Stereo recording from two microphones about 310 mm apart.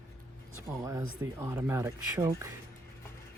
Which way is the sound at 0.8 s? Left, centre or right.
Centre.